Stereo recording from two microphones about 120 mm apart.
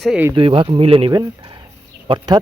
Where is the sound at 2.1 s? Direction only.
45° right (ahead or behind).